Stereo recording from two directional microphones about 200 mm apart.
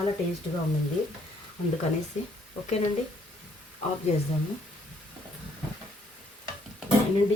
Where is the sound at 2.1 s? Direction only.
35° left (ahead or behind).